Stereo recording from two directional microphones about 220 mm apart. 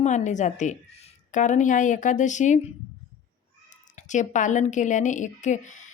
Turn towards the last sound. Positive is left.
turn(degrees=35)  # may be behind; listen again after turning